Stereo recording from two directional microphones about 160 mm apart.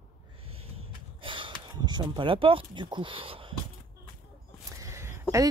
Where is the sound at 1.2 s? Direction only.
30° right (ahead or behind).